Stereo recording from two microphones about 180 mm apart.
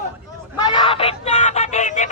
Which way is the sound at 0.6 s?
25° left (ahead or behind).